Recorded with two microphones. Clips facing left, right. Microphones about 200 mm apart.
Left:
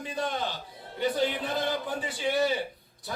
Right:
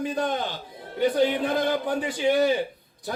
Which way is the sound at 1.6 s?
55° right (ahead or behind).